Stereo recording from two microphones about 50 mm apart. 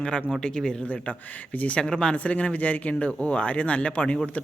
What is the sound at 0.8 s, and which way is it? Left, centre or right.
Speech, left.